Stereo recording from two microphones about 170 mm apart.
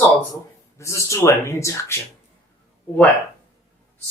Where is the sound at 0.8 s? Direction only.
15° left (ahead or behind).